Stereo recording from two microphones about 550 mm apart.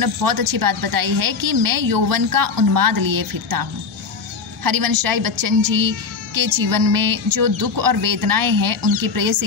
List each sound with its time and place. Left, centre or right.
0.0 s a woman's voice: right
4.6 s a woman's voice: right